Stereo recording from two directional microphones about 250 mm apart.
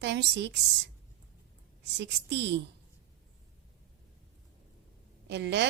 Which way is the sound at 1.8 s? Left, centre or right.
Right.